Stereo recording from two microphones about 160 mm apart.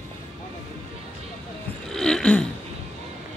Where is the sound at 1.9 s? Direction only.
5° left (ahead or behind).